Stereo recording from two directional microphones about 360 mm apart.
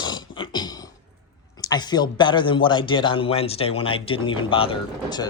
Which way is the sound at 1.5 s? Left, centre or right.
Centre.